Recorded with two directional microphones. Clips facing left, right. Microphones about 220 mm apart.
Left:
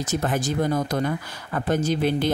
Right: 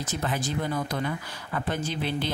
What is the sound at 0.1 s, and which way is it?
Speech, 45° left (ahead or behind).